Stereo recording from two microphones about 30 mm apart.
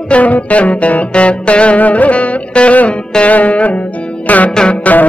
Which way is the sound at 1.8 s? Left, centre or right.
Left.